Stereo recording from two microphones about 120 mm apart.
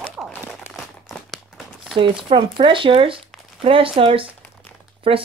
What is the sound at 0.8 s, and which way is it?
Crumpling, centre (ahead or behind).